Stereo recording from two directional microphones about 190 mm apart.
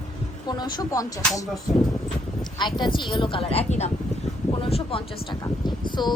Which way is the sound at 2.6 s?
25° left (ahead or behind).